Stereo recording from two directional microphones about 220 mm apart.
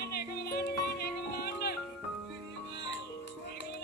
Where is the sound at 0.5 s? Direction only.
45° left (ahead or behind).